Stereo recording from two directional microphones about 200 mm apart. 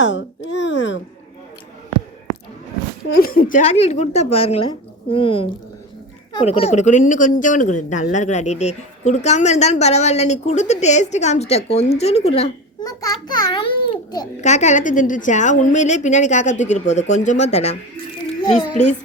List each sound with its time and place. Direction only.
0.0 s a sound: 65° left (ahead or behind)
3.2 s a child's voice: 45° left (ahead or behind); by 12.5 s 30° left (ahead or behind)
12.8 s a child's voice: 20° left (ahead or behind)
14.4 s speech: 35° left (ahead or behind)